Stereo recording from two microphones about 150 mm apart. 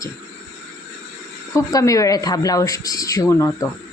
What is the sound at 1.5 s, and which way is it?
A man's voice, 20° left (ahead or behind).